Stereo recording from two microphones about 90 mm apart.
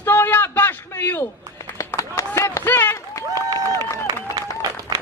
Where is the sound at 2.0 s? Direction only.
35° left (ahead or behind).